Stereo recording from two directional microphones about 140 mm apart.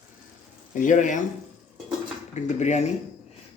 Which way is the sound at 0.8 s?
65° left (ahead or behind).